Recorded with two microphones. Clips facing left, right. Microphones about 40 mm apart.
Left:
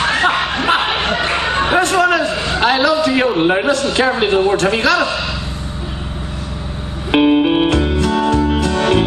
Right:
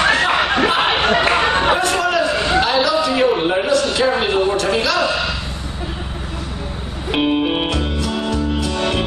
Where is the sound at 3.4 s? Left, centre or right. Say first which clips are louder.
Left 2 dB; left.